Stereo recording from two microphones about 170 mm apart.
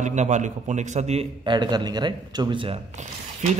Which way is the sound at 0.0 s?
45° right (ahead or behind).